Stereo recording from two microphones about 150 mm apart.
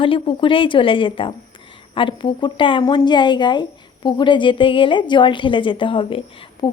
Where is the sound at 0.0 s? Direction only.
35° left (ahead or behind).